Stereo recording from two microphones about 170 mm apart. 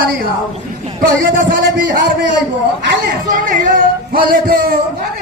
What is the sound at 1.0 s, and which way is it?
Speech, 55° right (ahead or behind).